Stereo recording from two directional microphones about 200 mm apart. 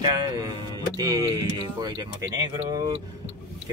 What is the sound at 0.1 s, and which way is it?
Speech, 20° right (ahead or behind).